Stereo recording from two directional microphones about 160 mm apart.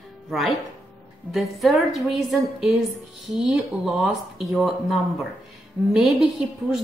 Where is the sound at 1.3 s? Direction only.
Centre (ahead or behind).